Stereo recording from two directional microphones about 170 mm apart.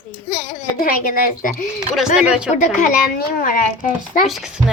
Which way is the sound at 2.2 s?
5° right (ahead or behind).